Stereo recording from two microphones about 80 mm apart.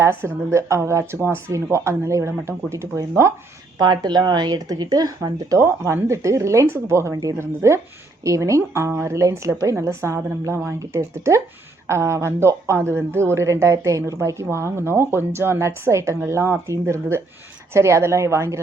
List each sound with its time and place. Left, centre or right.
0.0 s speech: right
3.8 s speech: right
5.5 s speech: right